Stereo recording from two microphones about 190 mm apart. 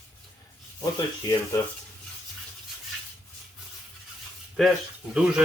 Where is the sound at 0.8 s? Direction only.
15° left (ahead or behind).